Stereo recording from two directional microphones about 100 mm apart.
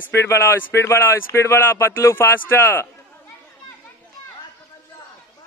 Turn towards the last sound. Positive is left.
turn(degrees=20)  # may be behind; listen again after turning